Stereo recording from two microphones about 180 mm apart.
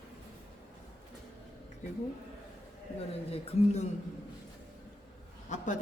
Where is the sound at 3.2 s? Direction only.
40° left (ahead or behind).